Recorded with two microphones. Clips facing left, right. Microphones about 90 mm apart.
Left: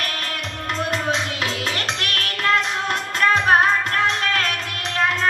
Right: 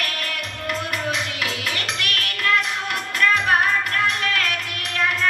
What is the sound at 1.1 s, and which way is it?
Music, 30° left (ahead or behind).